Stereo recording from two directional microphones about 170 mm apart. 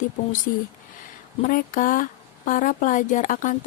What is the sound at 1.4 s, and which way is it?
Speech, 50° left (ahead or behind).